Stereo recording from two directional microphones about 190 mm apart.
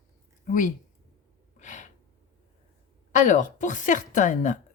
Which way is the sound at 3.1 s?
40° left (ahead or behind).